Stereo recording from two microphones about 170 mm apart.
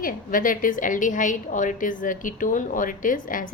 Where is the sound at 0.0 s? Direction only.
55° left (ahead or behind).